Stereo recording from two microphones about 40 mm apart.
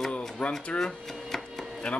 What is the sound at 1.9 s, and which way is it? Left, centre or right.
Speech, left.